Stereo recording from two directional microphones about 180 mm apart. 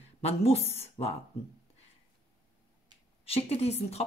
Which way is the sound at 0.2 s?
35° left (ahead or behind).